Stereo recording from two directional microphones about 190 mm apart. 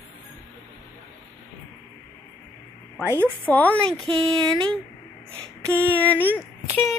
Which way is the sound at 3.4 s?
10° left (ahead or behind).